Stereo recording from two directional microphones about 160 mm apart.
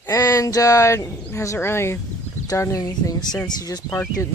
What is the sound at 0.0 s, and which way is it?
Speech, 20° left (ahead or behind).